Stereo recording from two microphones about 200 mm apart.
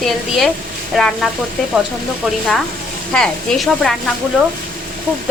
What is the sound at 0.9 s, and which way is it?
Speech, centre (ahead or behind).